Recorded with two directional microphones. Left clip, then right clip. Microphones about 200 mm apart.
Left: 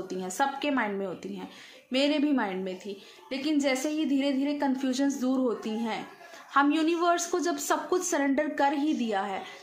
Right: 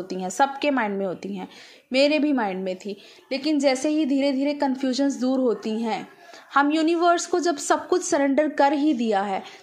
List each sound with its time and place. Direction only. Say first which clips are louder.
0.1 s a woman's voice: right 7 dB; 30° right (ahead or behind)